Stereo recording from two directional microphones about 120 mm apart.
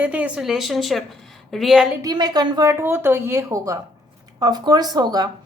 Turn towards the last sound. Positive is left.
turn(degrees=-35)  # may be behind; listen again after turning